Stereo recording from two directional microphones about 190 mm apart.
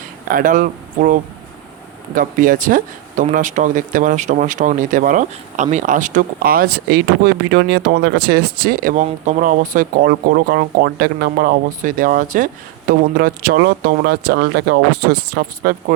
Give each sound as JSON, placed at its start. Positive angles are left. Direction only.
{"t": 0.3, "sound": "speech", "side_deg": -45}